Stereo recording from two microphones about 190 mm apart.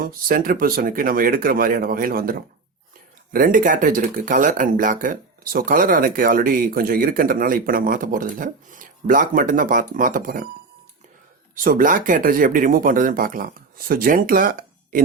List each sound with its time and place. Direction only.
0.0 s speech: 45° right (ahead or behind)
3.3 s speech: 45° right (ahead or behind)
11.5 s speech: 45° right (ahead or behind)